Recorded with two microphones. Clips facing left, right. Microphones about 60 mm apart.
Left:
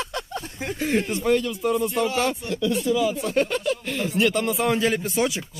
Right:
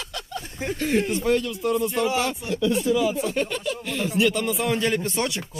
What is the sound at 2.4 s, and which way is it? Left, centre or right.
Speech, centre.